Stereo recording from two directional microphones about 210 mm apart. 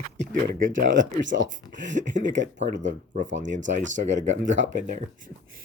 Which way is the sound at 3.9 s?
35° right (ahead or behind).